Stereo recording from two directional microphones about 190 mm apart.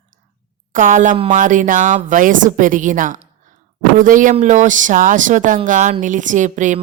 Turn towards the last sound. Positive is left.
turn(degrees=-40)  # may be behind; listen again after turning